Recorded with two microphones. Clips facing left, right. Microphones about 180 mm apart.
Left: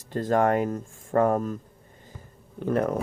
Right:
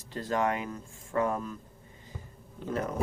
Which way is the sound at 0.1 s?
50° left (ahead or behind).